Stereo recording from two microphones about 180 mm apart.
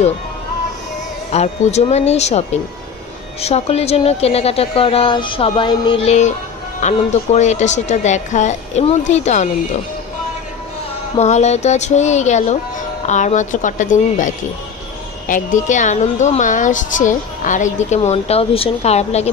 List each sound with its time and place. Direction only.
1.3 s a woman's voice: 35° left (ahead or behind)
11.1 s a woman's voice: 40° left (ahead or behind)